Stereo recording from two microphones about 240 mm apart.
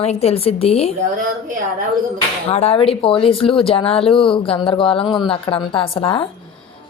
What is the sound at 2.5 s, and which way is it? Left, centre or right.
Speech, left.